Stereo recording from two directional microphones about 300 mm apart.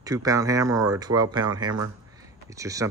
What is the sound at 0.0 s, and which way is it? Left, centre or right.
Speech, centre.